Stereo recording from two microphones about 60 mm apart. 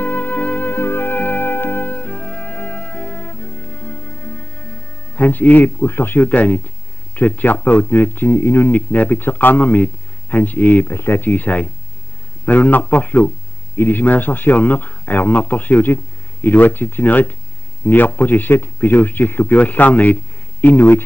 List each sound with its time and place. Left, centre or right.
0.0 s music: left
5.1 s a man's voice: left
10.9 s a man's voice: left